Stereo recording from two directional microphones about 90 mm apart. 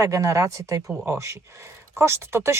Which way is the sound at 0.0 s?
35° right (ahead or behind).